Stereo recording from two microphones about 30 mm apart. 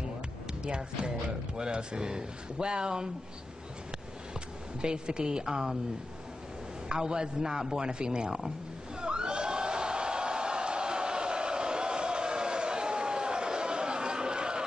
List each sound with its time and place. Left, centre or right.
0.7 s a man's voice: right
4.8 s a man's voice: right
6.9 s a man's voice: right
9.0 s a sound: right